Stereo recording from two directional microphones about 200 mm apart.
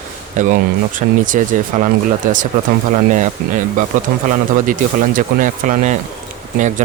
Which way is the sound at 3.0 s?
40° right (ahead or behind).